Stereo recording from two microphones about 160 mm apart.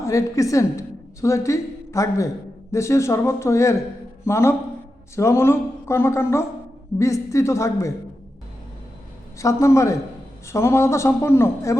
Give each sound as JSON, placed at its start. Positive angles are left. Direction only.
{"t": 0.0, "sound": "a woman's voice", "side_deg": 20}
{"t": 9.4, "sound": "a man's voice", "side_deg": 20}